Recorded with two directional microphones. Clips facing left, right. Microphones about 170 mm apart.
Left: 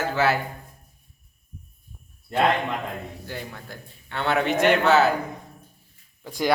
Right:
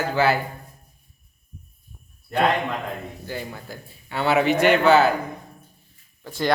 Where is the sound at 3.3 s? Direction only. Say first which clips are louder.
Right 6 dB; 5° right (ahead or behind).